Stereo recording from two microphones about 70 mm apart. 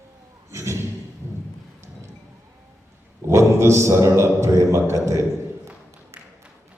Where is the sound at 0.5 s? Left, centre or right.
Right.